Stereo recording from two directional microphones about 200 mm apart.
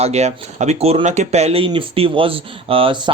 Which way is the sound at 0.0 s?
35° right (ahead or behind).